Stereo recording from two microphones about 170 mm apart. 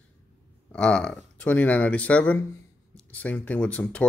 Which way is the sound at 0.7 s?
5° left (ahead or behind).